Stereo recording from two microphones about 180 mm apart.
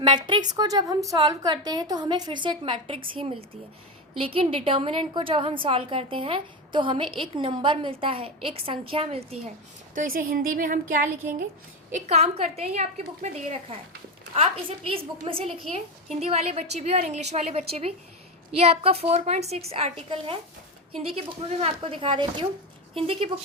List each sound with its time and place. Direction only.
0.0 s a woman's voice: 25° right (ahead or behind)
9.9 s a woman's voice: 50° right (ahead or behind)
12.0 s a woman's voice: 35° right (ahead or behind)
14.8 s a woman's voice: 30° right (ahead or behind)